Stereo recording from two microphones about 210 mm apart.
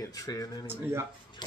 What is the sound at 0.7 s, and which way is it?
Speech, 10° right (ahead or behind).